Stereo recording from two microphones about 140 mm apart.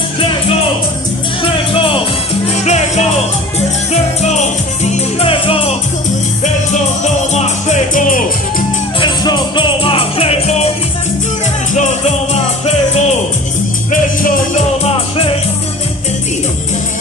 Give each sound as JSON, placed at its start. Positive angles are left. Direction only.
{"t": 0.2, "sound": "music", "side_deg": 40}
{"t": 3.9, "sound": "music", "side_deg": 55}
{"t": 5.3, "sound": "music", "side_deg": 45}
{"t": 7.3, "sound": "music", "side_deg": 55}
{"t": 9.0, "sound": "music", "side_deg": 35}
{"t": 14.2, "sound": "music", "side_deg": 75}
{"t": 14.8, "sound": "music", "side_deg": 45}